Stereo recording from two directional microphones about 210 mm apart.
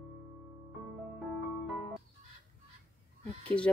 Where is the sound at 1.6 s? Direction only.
Centre (ahead or behind).